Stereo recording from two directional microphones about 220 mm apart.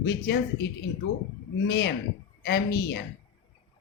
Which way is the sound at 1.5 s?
45° left (ahead or behind).